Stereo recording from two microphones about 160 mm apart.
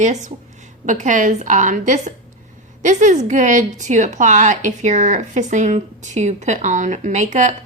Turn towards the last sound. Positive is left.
turn(degrees=-50)  # may be behind; listen again after turning